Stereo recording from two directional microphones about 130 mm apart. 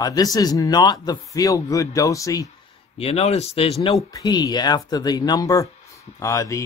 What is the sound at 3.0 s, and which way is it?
Speech, 50° left (ahead or behind).